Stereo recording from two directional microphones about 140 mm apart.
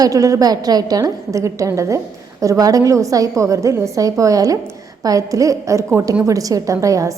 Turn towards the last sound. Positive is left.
turn(degrees=-25)  # may be behind; listen again after turning